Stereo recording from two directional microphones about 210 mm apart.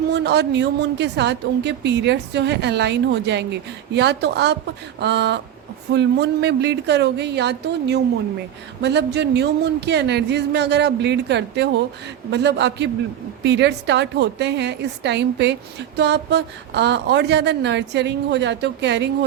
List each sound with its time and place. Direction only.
0.1 s a woman's voice: 55° right (ahead or behind)